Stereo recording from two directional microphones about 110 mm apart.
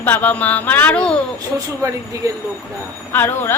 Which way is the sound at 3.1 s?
20° left (ahead or behind).